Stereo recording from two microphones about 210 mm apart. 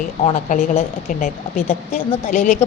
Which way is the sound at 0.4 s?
40° left (ahead or behind).